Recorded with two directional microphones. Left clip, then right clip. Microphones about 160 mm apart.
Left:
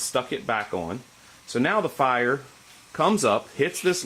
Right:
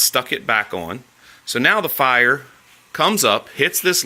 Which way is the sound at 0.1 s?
15° right (ahead or behind).